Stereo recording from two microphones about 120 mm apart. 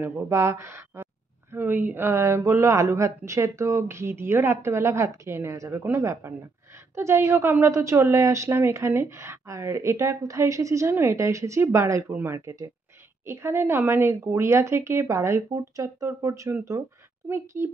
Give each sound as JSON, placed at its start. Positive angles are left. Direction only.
{"t": 0.0, "sound": "a woman's voice", "side_deg": -20}
{"t": 17.5, "sound": "a woman's voice", "side_deg": -20}